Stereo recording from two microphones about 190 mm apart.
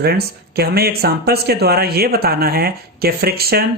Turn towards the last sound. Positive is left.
turn(degrees=-55)  # may be behind; listen again after turning